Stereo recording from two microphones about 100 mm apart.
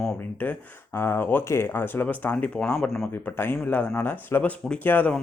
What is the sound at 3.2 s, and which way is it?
Speech, 20° left (ahead or behind).